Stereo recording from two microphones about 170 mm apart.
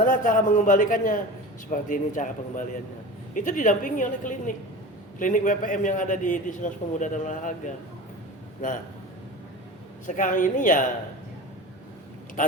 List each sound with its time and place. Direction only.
0.0 s a man's voice: 50° left (ahead or behind)
10.2 s a man's voice: 50° left (ahead or behind)
12.4 s a man's voice: 50° left (ahead or behind)